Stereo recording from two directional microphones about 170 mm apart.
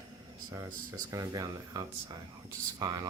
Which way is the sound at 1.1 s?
20° right (ahead or behind).